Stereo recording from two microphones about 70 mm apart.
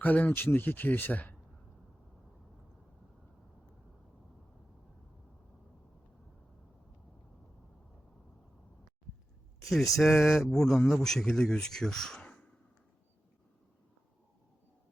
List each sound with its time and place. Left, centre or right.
0.0 s speech: left
9.6 s speech: centre
12.2 s sigh: centre